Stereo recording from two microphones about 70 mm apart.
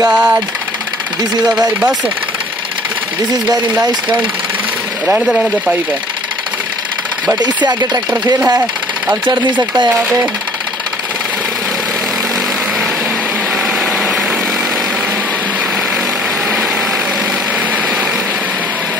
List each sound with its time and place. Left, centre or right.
0.1 s speech: centre
5.0 s speech: centre